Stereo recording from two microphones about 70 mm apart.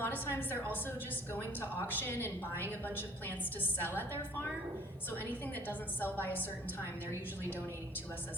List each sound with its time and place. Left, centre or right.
0.0 s a woman's voice: left